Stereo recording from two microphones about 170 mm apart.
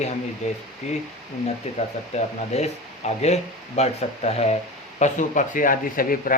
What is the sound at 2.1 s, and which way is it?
A man's voice, 40° left (ahead or behind).